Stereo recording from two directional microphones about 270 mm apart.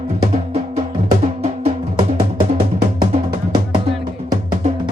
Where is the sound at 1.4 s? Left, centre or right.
Right.